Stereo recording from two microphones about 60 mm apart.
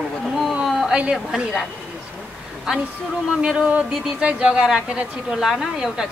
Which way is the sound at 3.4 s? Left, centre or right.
Centre.